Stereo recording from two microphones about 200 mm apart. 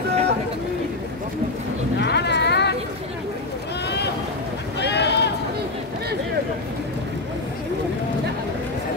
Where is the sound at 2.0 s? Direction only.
55° left (ahead or behind).